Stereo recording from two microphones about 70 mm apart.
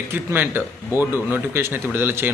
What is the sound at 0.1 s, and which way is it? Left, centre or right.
A man's voice, right.